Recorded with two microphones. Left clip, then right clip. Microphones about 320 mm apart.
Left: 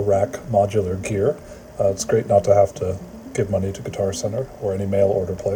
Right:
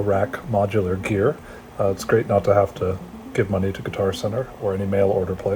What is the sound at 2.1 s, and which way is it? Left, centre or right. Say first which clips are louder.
Speech: left 2 dB; right.